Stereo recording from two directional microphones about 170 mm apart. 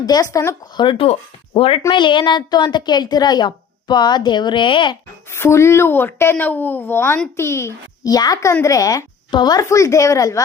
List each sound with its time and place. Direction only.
0.0 s a woman's voice: 20° left (ahead or behind)
5.3 s a woman's voice: 15° left (ahead or behind)